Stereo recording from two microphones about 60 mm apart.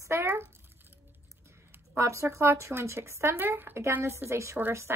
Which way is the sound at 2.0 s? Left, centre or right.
Right.